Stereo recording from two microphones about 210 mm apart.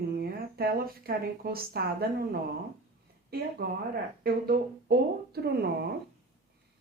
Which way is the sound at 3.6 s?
45° right (ahead or behind).